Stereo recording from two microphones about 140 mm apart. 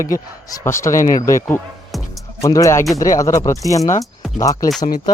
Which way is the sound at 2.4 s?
25° left (ahead or behind).